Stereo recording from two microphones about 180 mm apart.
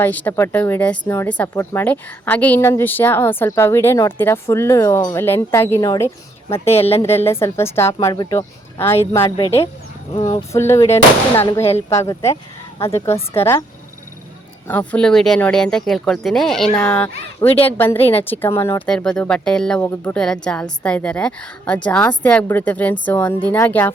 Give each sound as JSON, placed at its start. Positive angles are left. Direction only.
{"t": 0.0, "sound": "speech", "side_deg": 10}
{"t": 6.7, "sound": "speech", "side_deg": 35}
{"t": 7.3, "sound": "speech", "side_deg": 15}
{"t": 10.5, "sound": "speech", "side_deg": 15}
{"t": 14.7, "sound": "speech", "side_deg": 10}